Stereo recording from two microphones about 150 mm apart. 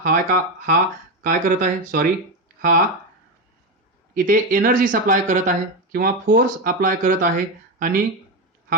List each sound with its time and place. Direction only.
0.0 s speech: 70° right (ahead or behind)
1.2 s speech: 60° right (ahead or behind)
4.1 s speech: 70° right (ahead or behind)